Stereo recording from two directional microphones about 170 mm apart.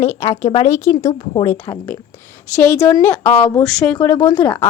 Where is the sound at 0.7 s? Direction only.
15° left (ahead or behind).